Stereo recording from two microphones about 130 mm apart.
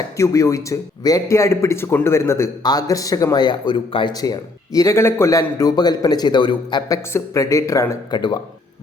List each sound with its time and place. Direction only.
0.2 s a man's voice: 25° left (ahead or behind)